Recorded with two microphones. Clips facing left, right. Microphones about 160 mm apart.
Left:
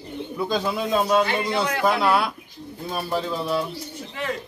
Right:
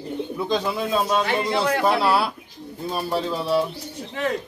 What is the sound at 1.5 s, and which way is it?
Speech, 30° right (ahead or behind).